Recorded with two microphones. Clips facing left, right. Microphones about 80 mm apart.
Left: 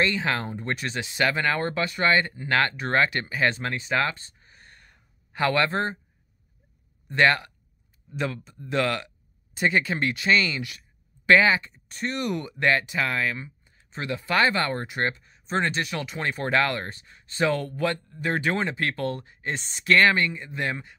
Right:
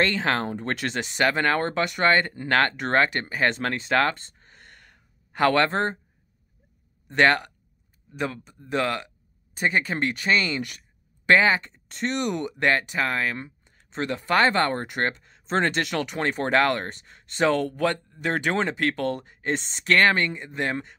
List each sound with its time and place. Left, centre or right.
0.2 s speech: right
0.9 s speech: right
3.6 s speech: right
7.1 s speech: right
8.1 s speech: right
11.2 s speech: right
12.2 s speech: right
12.6 s speech: right
14.0 s speech: right
15.8 s speech: right
16.2 s speech: right
17.6 s speech: right
18.1 s speech: right
18.9 s speech: right